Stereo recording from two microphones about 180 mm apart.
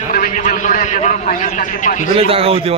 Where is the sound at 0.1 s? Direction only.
50° left (ahead or behind).